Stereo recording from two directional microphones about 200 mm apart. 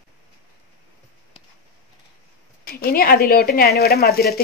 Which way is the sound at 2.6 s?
50° left (ahead or behind).